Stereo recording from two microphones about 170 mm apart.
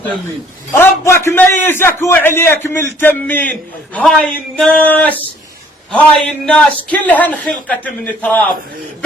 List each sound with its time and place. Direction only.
0.7 s a man's voice: 15° left (ahead or behind)